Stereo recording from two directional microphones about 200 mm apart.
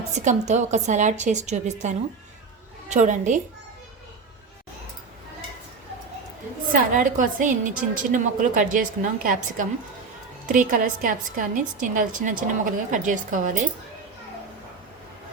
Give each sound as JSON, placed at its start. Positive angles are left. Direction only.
{"t": 0.1, "sound": "a woman's voice", "side_deg": -35}
{"t": 6.7, "sound": "a woman's voice", "side_deg": -40}